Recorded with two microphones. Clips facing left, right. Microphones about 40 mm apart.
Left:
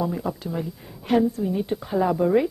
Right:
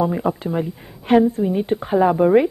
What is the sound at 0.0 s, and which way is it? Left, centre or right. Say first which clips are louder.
Speech: right 7 dB; right.